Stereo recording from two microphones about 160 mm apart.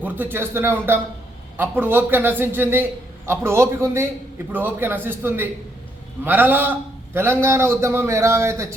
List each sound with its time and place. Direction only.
0.0 s a man's voice: 10° right (ahead or behind)